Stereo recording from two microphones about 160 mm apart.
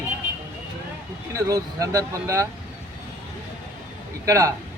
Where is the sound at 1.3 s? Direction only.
20° right (ahead or behind).